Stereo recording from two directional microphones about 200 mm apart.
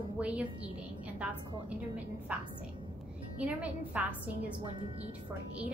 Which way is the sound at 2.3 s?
5° right (ahead or behind).